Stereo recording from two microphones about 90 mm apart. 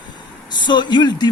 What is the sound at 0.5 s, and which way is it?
Speech, 55° left (ahead or behind).